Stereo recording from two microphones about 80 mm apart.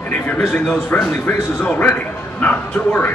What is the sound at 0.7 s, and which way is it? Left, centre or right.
A man's voice, centre.